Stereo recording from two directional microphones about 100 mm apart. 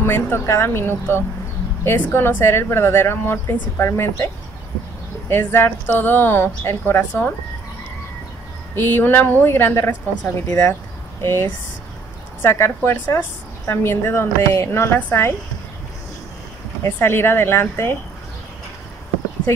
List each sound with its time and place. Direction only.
0.0 s a woman's voice: 20° left (ahead or behind)
5.3 s a woman's voice: 25° left (ahead or behind)
8.7 s a woman's voice: 20° left (ahead or behind)
16.8 s a woman's voice: 25° left (ahead or behind)